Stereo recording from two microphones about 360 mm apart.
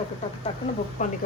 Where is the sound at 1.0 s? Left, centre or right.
Left.